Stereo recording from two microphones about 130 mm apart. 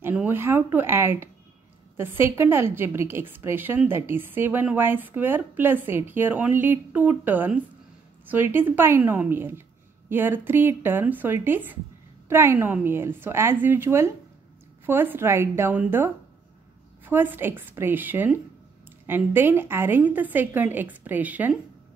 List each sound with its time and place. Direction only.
0.0 s a woman's voice: 15° right (ahead or behind)